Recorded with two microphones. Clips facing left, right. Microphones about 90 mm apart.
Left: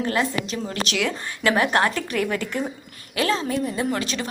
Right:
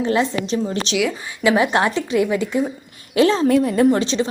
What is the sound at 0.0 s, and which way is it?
Speech, 25° right (ahead or behind).